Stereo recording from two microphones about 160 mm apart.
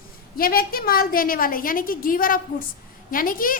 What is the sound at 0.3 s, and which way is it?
A woman's voice, 65° left (ahead or behind).